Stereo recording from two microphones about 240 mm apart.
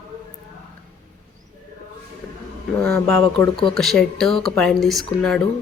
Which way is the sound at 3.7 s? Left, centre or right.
Centre.